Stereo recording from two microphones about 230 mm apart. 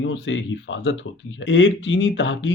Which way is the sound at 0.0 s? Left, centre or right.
Left.